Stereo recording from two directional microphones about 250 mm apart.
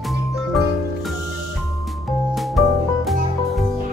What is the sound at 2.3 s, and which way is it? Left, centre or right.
Music, centre.